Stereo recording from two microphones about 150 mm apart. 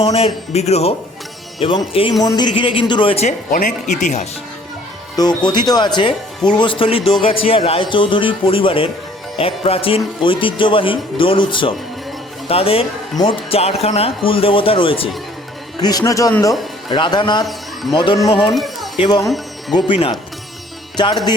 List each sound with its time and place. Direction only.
0.0 s a man's voice: 40° left (ahead or behind)
3.5 s speech: 65° left (ahead or behind)
4.0 s a man's voice: 50° left (ahead or behind)
5.4 s a man's voice: 30° left (ahead or behind)
15.8 s a man's voice: 25° left (ahead or behind)
18.5 s a sound: centre (ahead or behind)
18.9 s a man's voice: 30° left (ahead or behind)